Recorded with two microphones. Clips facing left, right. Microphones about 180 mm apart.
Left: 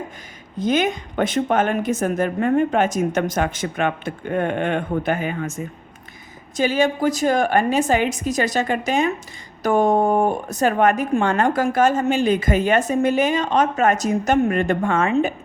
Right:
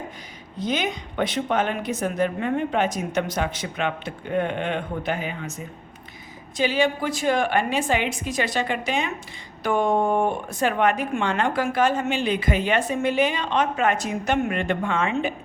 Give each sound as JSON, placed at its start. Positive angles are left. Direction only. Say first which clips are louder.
{"t": 0.6, "sound": "speech", "louder": "left 6 dB", "side_deg": 50}